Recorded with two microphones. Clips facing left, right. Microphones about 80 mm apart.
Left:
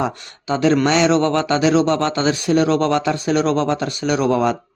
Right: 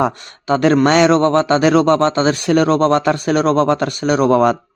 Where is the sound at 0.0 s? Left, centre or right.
Right.